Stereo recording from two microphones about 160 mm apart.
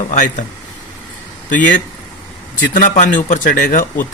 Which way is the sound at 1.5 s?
60° left (ahead or behind).